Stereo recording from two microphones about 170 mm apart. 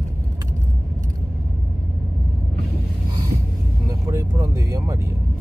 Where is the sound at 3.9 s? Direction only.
20° right (ahead or behind).